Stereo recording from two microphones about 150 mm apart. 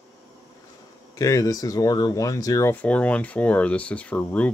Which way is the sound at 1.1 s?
20° left (ahead or behind).